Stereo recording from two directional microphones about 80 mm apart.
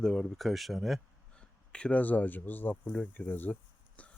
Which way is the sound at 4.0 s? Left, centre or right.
Centre.